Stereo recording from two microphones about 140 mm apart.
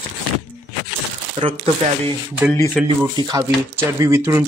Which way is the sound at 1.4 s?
40° right (ahead or behind).